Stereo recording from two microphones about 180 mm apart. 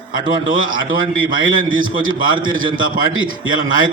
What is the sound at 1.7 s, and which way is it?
A man's voice, 90° right.